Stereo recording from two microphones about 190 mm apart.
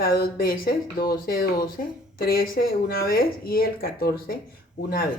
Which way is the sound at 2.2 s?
50° left (ahead or behind).